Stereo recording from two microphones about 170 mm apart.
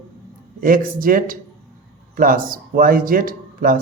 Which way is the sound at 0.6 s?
55° right (ahead or behind).